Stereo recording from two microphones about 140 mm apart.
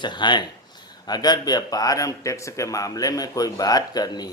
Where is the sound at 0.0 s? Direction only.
35° left (ahead or behind).